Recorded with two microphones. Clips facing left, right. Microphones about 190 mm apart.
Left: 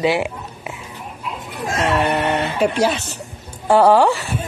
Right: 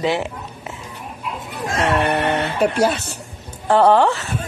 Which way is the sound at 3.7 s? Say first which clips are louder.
Left 1 dB; 10° left (ahead or behind).